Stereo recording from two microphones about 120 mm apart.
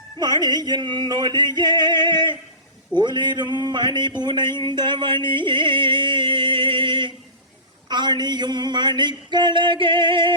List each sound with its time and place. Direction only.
0.2 s speech: 35° right (ahead or behind)